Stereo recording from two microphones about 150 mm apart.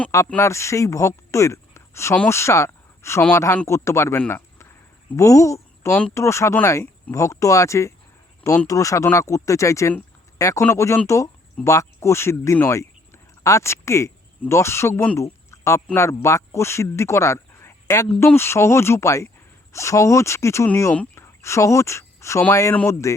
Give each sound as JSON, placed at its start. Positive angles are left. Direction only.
{"t": 0.3, "sound": "speech", "side_deg": 15}
{"t": 4.3, "sound": "a sound", "side_deg": 15}
{"t": 5.1, "sound": "a woman's voice", "side_deg": 20}
{"t": 5.9, "sound": "speech", "side_deg": 10}
{"t": 6.1, "sound": "speech", "side_deg": 20}
{"t": 15.2, "sound": "a sound", "side_deg": 20}
{"t": 16.0, "sound": "a man's voice", "side_deg": 20}